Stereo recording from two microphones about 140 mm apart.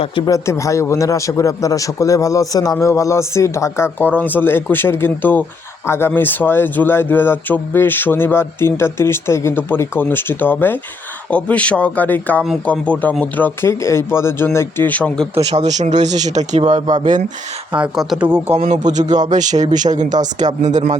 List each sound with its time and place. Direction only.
0.3 s a man's voice: 20° left (ahead or behind)
15.5 s speech: 55° right (ahead or behind)
17.7 s speech: 5° right (ahead or behind)
18.5 s speech: 50° right (ahead or behind)
19.0 s speech: 30° right (ahead or behind)
19.3 s speech: 60° right (ahead or behind)